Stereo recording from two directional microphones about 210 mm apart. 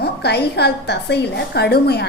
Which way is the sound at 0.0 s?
50° left (ahead or behind).